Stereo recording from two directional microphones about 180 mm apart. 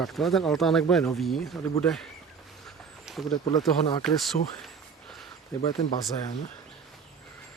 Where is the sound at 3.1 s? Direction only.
Centre (ahead or behind).